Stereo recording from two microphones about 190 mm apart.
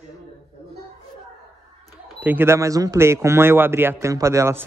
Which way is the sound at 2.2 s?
10° right (ahead or behind).